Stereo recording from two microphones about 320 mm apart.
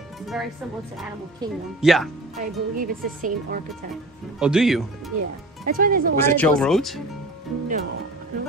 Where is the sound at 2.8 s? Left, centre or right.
Right.